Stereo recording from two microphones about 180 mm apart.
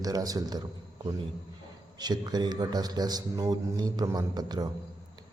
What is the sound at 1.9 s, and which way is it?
A man's voice, 20° right (ahead or behind).